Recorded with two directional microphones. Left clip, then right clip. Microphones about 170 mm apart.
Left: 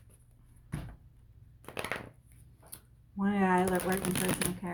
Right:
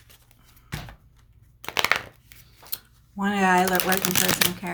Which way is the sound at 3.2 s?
30° right (ahead or behind).